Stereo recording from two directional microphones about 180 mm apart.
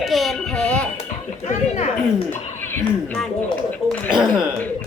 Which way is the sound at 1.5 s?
35° left (ahead or behind).